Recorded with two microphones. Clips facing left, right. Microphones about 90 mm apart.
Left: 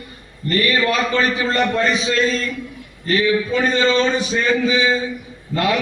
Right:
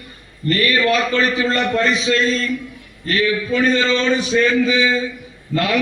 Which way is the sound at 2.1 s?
15° left (ahead or behind).